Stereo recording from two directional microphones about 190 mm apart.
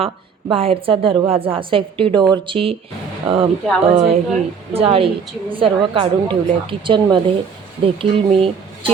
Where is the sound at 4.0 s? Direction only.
35° right (ahead or behind).